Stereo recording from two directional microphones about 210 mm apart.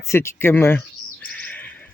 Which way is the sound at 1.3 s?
5° left (ahead or behind).